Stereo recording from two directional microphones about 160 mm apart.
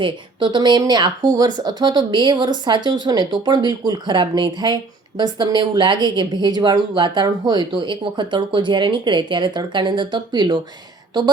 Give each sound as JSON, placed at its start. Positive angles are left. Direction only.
{"t": 0.0, "sound": "speech", "side_deg": -30}